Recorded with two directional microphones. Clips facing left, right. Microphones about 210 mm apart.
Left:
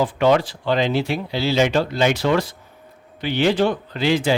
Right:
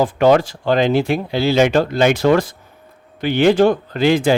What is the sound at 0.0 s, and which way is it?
Speech, 45° right (ahead or behind).